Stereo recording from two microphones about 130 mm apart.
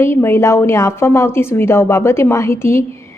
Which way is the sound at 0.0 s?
20° left (ahead or behind).